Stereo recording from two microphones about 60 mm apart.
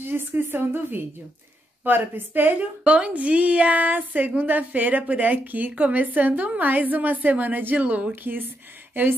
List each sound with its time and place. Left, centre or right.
0.0 s a woman's voice: right
2.8 s speech: centre